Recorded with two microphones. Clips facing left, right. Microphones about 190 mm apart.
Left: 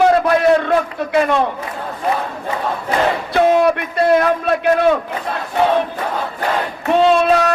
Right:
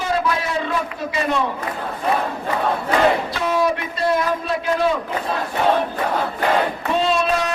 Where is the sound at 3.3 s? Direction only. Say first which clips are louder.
Left 7 dB; 60° left (ahead or behind).